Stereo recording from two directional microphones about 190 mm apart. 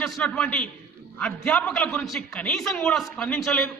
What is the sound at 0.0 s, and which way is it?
A man's voice, 5° left (ahead or behind).